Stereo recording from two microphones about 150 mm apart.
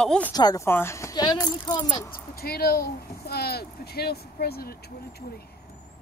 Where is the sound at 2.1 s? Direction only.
90° left.